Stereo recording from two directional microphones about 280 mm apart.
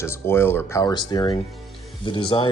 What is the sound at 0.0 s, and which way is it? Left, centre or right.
Speech, centre.